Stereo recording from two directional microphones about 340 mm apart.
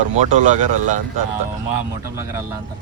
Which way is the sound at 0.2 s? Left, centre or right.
Right.